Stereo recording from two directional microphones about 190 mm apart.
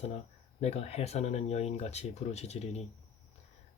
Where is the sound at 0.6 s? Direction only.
35° left (ahead or behind).